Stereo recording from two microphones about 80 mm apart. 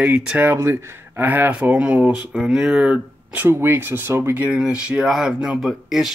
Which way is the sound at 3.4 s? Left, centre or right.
Right.